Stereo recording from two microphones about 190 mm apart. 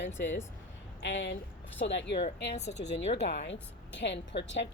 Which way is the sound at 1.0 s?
75° left (ahead or behind).